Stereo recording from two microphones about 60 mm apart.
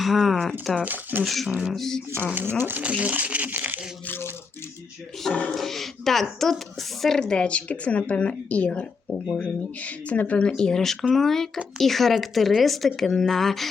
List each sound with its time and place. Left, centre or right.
0.0 s speech: centre
2.2 s speech: right
2.8 s speech: centre
4.0 s a sound: left
5.3 s speech: centre
5.5 s speech: centre; by 10.5 s left
10.5 s speech: centre